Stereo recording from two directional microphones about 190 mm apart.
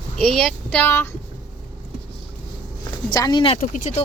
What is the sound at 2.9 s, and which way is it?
Speech, 20° left (ahead or behind).